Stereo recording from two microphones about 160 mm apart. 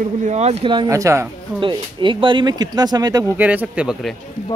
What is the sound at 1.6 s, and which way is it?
Speech, 30° right (ahead or behind).